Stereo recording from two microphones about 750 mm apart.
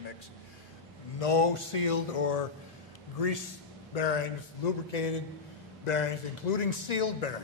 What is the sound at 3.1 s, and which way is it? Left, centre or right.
A man's voice, left.